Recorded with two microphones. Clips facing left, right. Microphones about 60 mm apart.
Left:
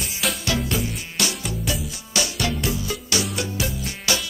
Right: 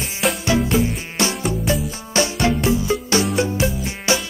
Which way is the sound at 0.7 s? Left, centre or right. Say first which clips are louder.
Right 7 dB; right.